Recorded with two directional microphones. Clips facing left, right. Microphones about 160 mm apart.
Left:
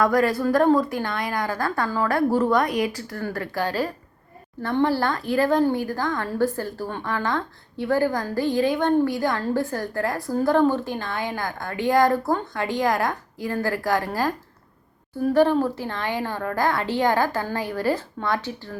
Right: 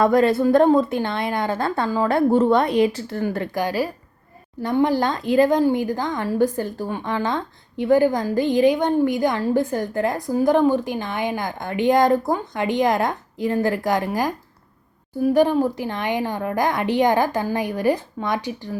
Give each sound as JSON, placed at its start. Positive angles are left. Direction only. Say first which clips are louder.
{"t": 0.0, "sound": "speech", "louder": "right 4 dB", "side_deg": -25}